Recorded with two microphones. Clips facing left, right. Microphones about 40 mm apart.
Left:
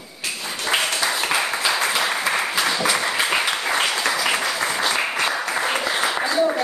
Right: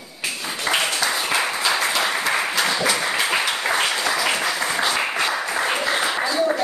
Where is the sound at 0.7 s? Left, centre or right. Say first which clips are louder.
Even; right.